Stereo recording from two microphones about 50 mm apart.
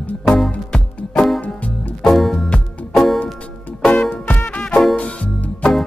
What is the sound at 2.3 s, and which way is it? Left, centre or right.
Music, centre.